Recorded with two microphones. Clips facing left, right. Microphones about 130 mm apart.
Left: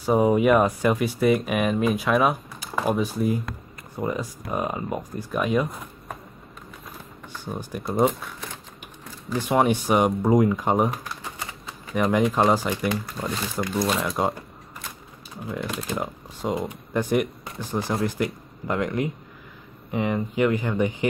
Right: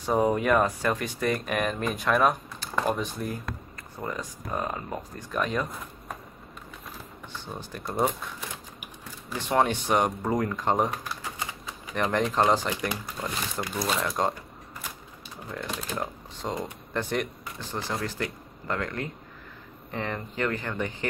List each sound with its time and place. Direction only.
0.0 s speech: 5° left (ahead or behind)
7.4 s speech: 10° left (ahead or behind)
7.9 s speech: 5° right (ahead or behind)
9.3 s speech: 10° left (ahead or behind)
13.8 s speech: 5° left (ahead or behind)
15.5 s speech: 5° left (ahead or behind)